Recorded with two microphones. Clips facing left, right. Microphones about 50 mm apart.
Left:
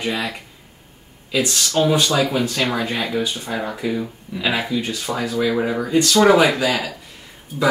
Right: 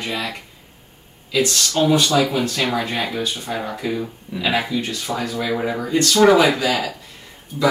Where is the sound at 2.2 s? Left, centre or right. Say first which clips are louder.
Even; centre.